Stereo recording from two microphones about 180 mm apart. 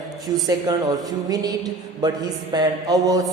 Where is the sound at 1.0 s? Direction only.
20° right (ahead or behind).